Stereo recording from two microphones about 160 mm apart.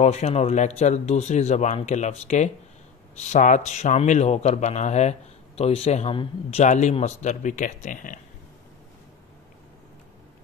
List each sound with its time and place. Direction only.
0.0 s a man's voice: 45° left (ahead or behind)